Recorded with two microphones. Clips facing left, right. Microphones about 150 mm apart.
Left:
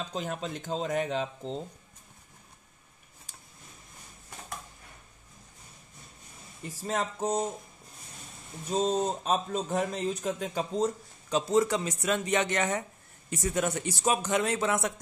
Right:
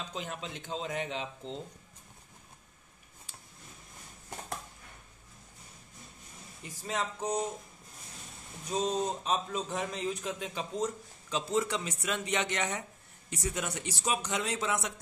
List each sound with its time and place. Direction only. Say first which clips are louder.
0.1 s a man's voice: left 5 dB; 45° left (ahead or behind)
6.8 s a man's voice: left 4 dB; 40° left (ahead or behind)
8.7 s speech: left 4 dB; 30° left (ahead or behind)
9.2 s a man's voice: left 3 dB; 50° left (ahead or behind)